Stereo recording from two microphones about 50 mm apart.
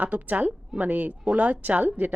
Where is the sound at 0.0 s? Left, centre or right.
Right.